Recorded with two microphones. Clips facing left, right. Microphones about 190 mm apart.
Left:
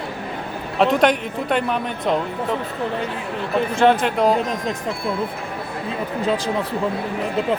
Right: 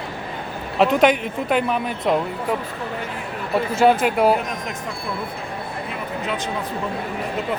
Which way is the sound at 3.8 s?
5° right (ahead or behind).